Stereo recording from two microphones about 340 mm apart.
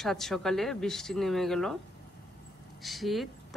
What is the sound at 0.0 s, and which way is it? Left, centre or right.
Speech, centre.